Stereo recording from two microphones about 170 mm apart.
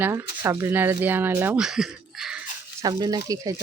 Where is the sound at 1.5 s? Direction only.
5° right (ahead or behind).